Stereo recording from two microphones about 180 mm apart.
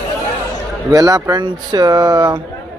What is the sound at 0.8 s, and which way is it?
Speech, 20° right (ahead or behind).